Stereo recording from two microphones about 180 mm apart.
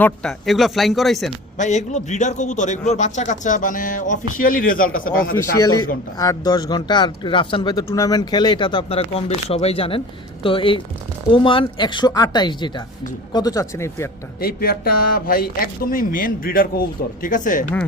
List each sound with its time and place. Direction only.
0.0 s speech: 5° left (ahead or behind)
1.5 s a man's voice: 40° left (ahead or behind)
5.4 s speech: 20° left (ahead or behind)
14.4 s a man's voice: 55° left (ahead or behind)